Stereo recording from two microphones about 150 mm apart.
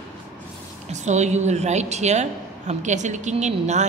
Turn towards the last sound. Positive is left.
turn(degrees=-50)  # may be behind; listen again after turning